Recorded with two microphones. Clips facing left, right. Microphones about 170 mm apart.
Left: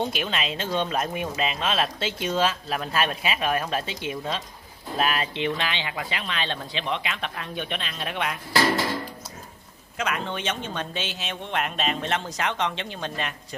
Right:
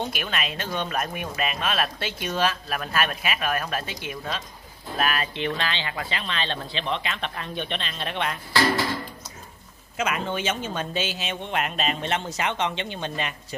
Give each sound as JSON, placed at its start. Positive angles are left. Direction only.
{"t": 0.1, "sound": "speech", "side_deg": 25}
{"t": 9.9, "sound": "speech", "side_deg": -5}